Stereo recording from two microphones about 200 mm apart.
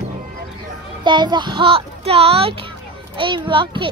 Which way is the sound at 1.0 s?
20° right (ahead or behind).